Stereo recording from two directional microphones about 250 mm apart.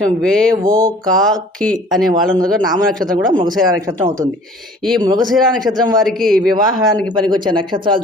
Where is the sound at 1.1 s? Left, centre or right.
Centre.